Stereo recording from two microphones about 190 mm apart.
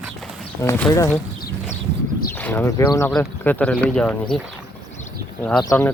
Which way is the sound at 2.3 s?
10° left (ahead or behind).